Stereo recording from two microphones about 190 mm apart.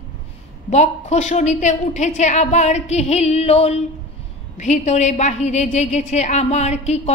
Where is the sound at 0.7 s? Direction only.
35° left (ahead or behind).